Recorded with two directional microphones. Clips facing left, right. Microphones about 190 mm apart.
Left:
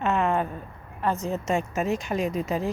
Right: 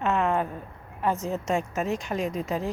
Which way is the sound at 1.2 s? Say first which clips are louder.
Left 1 dB; centre (ahead or behind).